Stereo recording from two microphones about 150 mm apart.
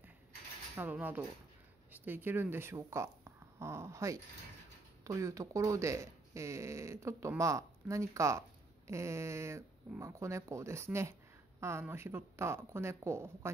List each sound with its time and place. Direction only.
0.7 s speech: 10° right (ahead or behind)